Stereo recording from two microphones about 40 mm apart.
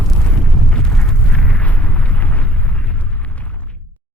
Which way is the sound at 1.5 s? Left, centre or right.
Left.